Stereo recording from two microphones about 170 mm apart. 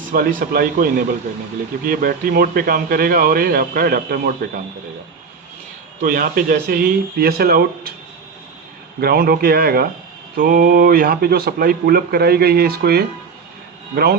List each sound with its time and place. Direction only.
0.1 s speech: 55° right (ahead or behind)
6.0 s speech: 55° right (ahead or behind)
9.0 s speech: 65° right (ahead or behind)